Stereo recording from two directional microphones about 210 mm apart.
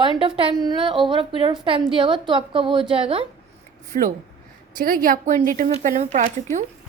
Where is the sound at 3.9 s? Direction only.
35° right (ahead or behind).